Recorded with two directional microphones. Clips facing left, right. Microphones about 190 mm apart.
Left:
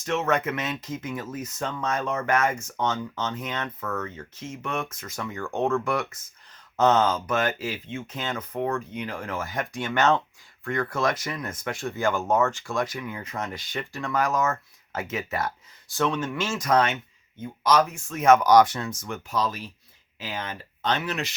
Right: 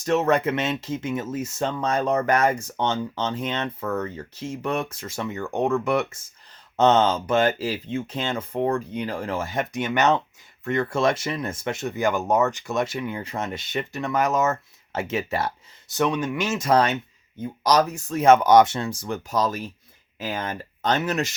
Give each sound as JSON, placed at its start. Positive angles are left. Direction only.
{"t": 0.0, "sound": "speech", "side_deg": -35}
{"t": 16.6, "sound": "speech", "side_deg": -30}